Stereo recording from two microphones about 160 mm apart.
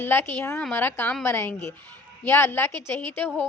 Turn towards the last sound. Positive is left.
turn(degrees=10)  # may be behind; listen again after turning